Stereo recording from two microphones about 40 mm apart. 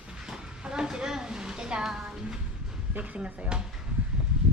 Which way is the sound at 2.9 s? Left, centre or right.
Right.